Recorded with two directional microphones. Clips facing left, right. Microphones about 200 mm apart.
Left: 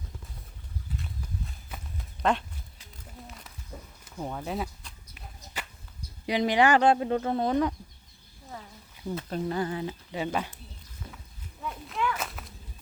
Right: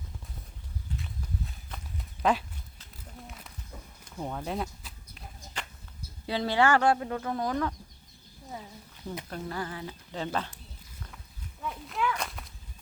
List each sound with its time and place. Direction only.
1.5 s horse: centre (ahead or behind)
3.2 s a sound: centre (ahead or behind)
6.2 s speech: 15° left (ahead or behind)
9.3 s speech: 25° left (ahead or behind)
10.1 s speech: 10° left (ahead or behind)
11.6 s walk: centre (ahead or behind)